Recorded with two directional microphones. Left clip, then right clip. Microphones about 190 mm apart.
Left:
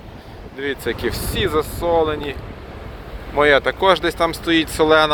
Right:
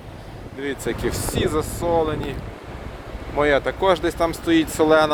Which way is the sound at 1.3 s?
5° left (ahead or behind).